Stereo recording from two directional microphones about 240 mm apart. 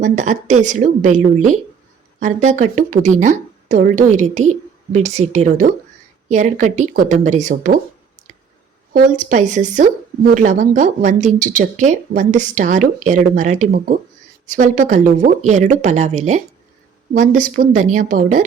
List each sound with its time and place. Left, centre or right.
0.0 s speech: right
8.9 s speech: right